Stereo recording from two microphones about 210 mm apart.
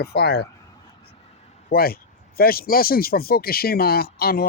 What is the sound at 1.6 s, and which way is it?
Speech, 45° left (ahead or behind).